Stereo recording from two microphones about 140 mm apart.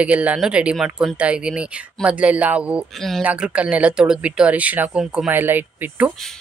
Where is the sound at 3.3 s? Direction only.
10° right (ahead or behind).